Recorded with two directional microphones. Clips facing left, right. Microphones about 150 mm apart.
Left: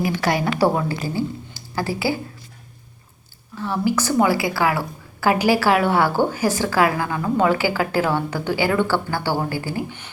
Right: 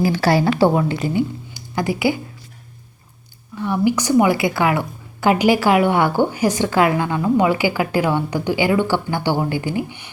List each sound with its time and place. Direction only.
0.0 s a woman's voice: 30° right (ahead or behind)
0.7 s speech: 20° right (ahead or behind)
3.6 s a woman's voice: 15° right (ahead or behind)